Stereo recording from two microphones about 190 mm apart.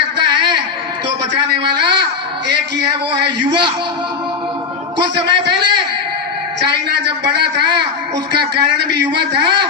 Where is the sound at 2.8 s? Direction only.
60° right (ahead or behind).